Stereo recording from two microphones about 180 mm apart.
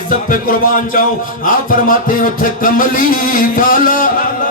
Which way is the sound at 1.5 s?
50° left (ahead or behind).